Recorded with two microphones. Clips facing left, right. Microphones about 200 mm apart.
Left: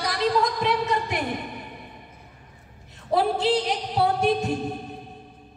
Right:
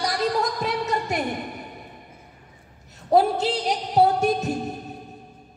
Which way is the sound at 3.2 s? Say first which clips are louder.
Right 1 dB; 45° right (ahead or behind).